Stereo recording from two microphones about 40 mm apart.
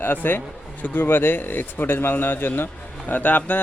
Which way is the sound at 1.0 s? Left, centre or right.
Left.